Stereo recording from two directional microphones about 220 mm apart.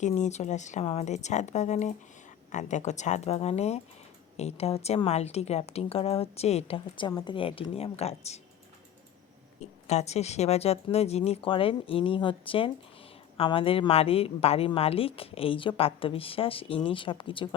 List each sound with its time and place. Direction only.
0.0 s a woman's voice: 30° left (ahead or behind)
9.8 s a woman's voice: 30° left (ahead or behind)